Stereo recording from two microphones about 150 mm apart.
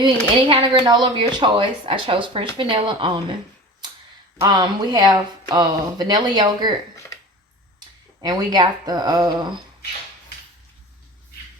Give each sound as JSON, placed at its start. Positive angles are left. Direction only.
{"t": 0.0, "sound": "speech", "side_deg": -35}
{"t": 4.4, "sound": "speech", "side_deg": -30}
{"t": 8.2, "sound": "speech", "side_deg": -25}